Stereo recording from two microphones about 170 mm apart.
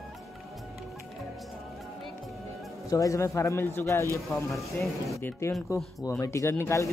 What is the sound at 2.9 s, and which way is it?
A man's voice, 20° left (ahead or behind).